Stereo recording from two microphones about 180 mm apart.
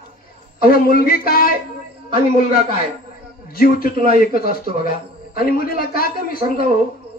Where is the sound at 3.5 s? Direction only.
55° left (ahead or behind).